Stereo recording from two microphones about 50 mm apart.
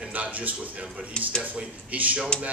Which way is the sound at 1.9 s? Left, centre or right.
Right.